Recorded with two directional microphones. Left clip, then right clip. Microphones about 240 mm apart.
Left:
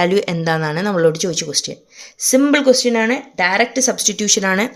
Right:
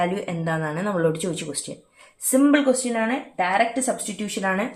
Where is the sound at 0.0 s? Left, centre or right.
Left.